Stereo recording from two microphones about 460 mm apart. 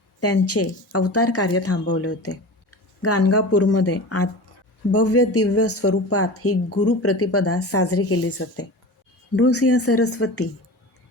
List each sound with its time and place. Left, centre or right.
0.2 s speech: left